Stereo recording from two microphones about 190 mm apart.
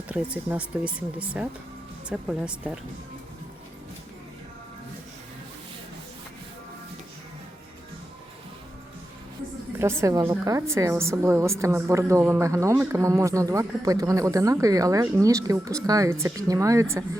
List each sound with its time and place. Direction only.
0.1 s a woman's voice: 5° right (ahead or behind)
10.0 s a woman's voice: 15° right (ahead or behind)